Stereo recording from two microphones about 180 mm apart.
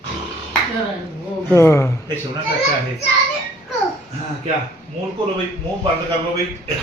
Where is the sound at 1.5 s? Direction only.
15° left (ahead or behind).